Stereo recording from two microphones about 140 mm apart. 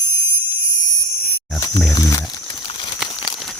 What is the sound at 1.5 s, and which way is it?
Wild animals, 25° left (ahead or behind).